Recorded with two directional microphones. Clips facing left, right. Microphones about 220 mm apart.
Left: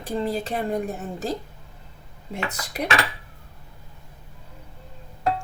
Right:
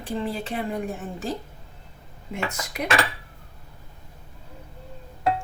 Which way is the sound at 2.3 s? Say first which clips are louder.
Even; 35° left (ahead or behind).